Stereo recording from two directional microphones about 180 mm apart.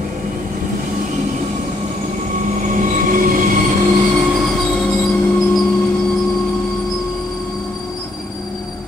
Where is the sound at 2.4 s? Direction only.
45° right (ahead or behind).